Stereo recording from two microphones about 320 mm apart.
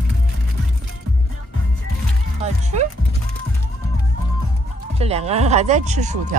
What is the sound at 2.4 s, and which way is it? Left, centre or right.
Music, right.